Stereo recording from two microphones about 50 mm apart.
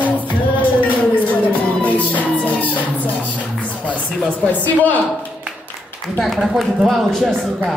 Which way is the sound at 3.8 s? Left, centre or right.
Left.